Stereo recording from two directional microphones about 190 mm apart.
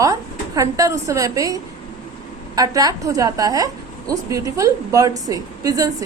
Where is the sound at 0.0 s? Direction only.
20° right (ahead or behind).